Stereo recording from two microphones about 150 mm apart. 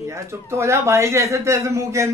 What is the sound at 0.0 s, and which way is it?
Speech, 20° right (ahead or behind).